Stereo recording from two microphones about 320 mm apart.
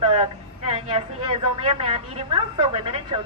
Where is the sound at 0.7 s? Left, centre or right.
Centre.